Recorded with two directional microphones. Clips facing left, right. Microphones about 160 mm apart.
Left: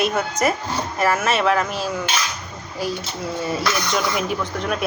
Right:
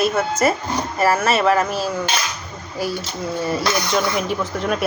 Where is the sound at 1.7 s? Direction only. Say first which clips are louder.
Right 2 dB; 40° right (ahead or behind).